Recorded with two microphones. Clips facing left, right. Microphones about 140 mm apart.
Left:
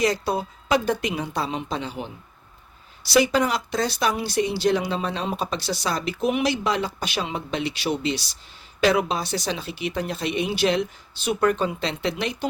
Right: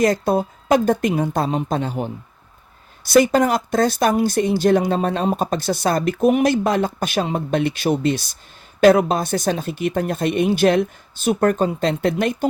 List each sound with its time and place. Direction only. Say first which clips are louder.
0.0 s speech: right 6 dB; 50° right (ahead or behind)